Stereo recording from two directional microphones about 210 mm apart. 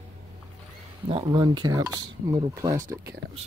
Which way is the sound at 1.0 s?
25° right (ahead or behind).